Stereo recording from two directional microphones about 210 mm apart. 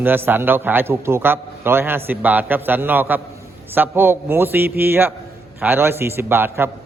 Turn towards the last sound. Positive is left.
turn(degrees=-10)  # may be behind; listen again after turning